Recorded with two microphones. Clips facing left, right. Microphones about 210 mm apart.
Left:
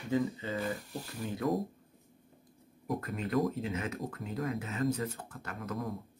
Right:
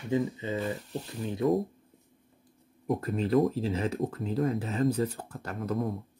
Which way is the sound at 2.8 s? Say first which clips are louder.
Right 6 dB; 25° right (ahead or behind).